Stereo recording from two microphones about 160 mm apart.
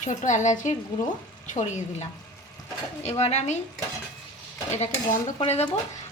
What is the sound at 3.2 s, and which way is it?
Speech, 45° left (ahead or behind).